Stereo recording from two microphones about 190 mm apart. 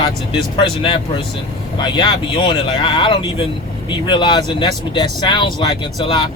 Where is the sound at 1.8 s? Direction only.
25° left (ahead or behind).